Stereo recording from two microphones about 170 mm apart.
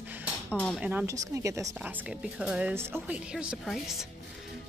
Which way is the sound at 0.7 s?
10° right (ahead or behind).